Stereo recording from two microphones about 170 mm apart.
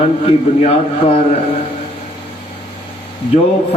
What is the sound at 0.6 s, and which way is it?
Speech, 40° left (ahead or behind).